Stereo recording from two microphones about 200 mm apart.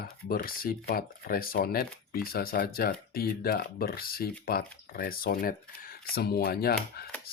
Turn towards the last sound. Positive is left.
turn(degrees=50)  # may be behind; listen again after turning